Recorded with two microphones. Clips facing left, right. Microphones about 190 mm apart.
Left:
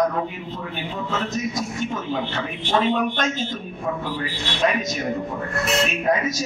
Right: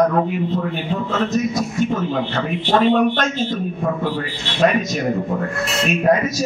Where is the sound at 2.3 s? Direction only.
50° right (ahead or behind).